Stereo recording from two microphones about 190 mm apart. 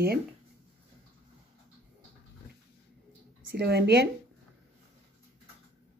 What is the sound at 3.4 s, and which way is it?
Speech, 60° right (ahead or behind).